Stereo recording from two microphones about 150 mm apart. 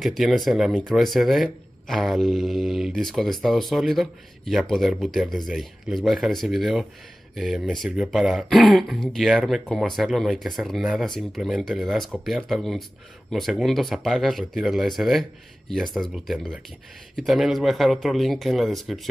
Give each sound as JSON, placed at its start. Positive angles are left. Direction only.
{"t": 0.0, "sound": "speech", "side_deg": 0}